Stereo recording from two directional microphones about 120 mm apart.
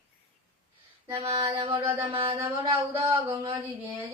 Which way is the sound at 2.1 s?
50° right (ahead or behind).